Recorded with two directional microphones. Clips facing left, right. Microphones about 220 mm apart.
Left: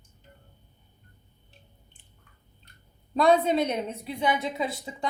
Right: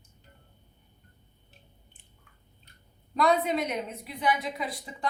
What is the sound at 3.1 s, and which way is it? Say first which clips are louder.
A woman's voice: left 4 dB; 30° left (ahead or behind).